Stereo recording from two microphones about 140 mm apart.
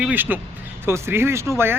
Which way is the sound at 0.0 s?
10° right (ahead or behind).